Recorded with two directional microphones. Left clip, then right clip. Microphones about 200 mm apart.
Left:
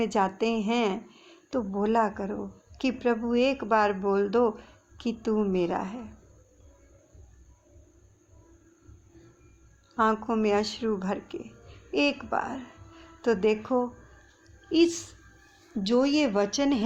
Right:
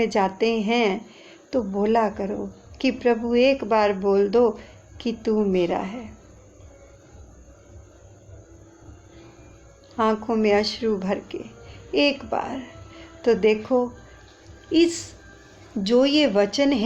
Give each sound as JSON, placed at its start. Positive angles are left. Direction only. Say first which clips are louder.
{"t": 0.0, "sound": "speech", "louder": "right 5 dB", "side_deg": 25}
{"t": 9.9, "sound": "speech", "louder": "right 3 dB", "side_deg": 25}